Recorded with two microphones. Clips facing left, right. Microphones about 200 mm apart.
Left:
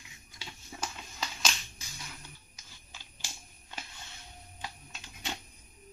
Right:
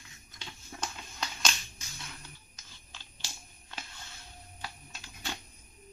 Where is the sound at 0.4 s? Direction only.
5° left (ahead or behind).